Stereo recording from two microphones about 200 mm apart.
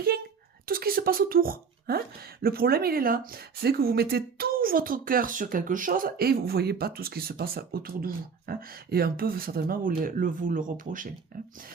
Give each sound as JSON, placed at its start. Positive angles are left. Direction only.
{"t": 0.6, "sound": "a woman's voice", "side_deg": -50}